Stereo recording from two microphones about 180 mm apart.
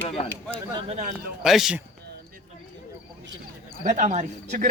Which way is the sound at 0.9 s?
45° right (ahead or behind).